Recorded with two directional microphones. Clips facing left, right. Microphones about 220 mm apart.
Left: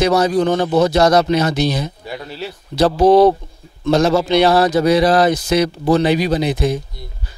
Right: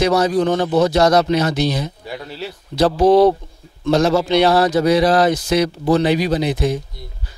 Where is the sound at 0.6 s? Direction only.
30° left (ahead or behind).